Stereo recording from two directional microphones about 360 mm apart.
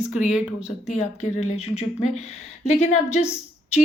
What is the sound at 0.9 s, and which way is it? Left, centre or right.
Speech, centre.